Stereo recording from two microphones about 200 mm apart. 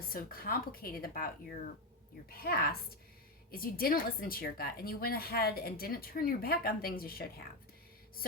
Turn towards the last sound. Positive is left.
turn(degrees=50)  # may be behind; listen again after turning